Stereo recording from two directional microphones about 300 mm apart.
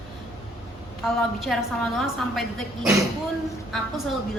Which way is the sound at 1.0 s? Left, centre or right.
Centre.